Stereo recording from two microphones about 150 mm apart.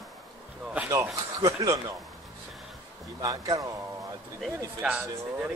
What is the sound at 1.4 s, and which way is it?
Speech, 20° right (ahead or behind).